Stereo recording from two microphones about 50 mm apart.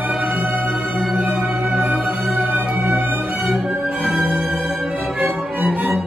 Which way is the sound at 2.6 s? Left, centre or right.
Right.